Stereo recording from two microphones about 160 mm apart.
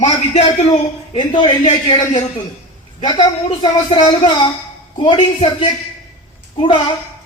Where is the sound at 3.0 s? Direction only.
30° left (ahead or behind).